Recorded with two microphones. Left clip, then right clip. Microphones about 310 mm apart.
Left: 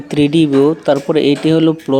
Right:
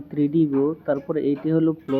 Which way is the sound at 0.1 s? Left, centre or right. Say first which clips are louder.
Left 9 dB; centre.